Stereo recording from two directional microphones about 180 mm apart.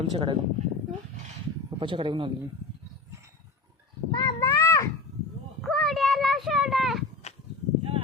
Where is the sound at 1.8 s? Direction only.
25° right (ahead or behind).